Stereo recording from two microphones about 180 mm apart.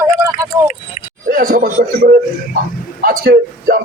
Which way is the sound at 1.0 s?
40° left (ahead or behind).